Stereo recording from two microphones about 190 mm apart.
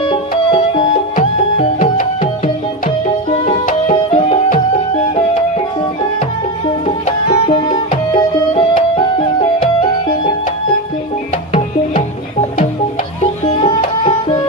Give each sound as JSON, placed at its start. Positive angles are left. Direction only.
{"t": 0.0, "sound": "music", "side_deg": 25}
{"t": 3.7, "sound": "music", "side_deg": 35}
{"t": 6.8, "sound": "music", "side_deg": 30}
{"t": 11.5, "sound": "music", "side_deg": 30}
{"t": 13.7, "sound": "music", "side_deg": 25}